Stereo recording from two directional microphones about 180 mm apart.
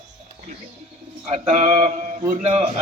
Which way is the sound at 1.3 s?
40° right (ahead or behind).